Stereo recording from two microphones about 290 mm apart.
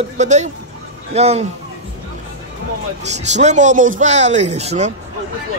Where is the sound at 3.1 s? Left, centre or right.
Right.